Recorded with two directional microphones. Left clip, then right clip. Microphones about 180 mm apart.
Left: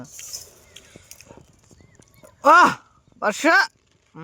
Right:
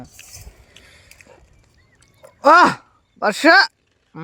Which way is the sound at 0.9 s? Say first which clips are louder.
Right 1 dB; 30° right (ahead or behind).